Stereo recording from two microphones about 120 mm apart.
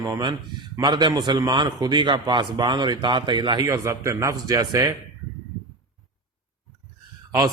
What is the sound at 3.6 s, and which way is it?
A man's voice, 25° right (ahead or behind).